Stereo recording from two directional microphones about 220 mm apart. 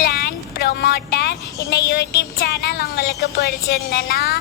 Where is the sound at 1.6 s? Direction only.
50° left (ahead or behind).